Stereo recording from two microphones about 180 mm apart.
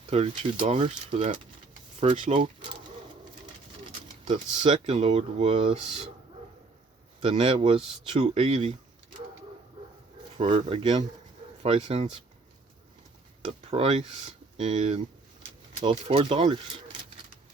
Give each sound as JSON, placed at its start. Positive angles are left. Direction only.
{"t": 0.1, "sound": "speech", "side_deg": -35}
{"t": 4.3, "sound": "speech", "side_deg": -35}
{"t": 7.2, "sound": "speech", "side_deg": -35}
{"t": 10.5, "sound": "speech", "side_deg": -30}
{"t": 13.4, "sound": "speech", "side_deg": -35}